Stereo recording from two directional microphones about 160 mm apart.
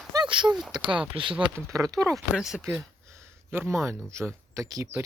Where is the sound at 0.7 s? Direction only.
30° right (ahead or behind).